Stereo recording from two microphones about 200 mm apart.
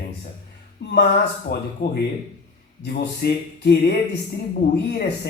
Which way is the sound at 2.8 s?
50° left (ahead or behind).